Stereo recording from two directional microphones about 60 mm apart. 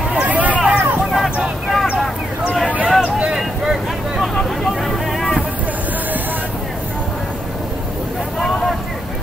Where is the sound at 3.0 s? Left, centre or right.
Centre.